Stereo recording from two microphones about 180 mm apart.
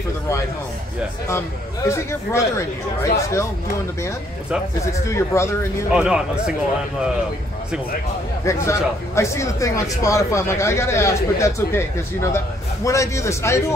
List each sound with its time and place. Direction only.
1.9 s speech: 15° left (ahead or behind)
4.8 s speech: 15° left (ahead or behind)
5.9 s speech: 5° right (ahead or behind)
8.5 s speech: 15° left (ahead or behind)